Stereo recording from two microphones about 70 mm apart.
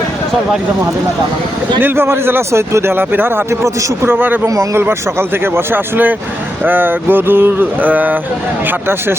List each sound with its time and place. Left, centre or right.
1.8 s a man's voice: right
3.6 s a man's voice: right
4.1 s speech: right
4.4 s a man's voice: right
4.8 s a man's voice: right